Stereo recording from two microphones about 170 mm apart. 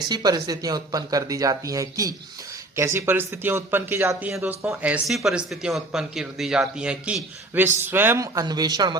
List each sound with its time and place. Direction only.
0.1 s speech: 25° right (ahead or behind)